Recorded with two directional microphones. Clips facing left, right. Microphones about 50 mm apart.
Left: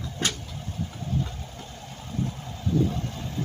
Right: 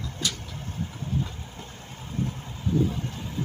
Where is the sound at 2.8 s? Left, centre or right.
Centre.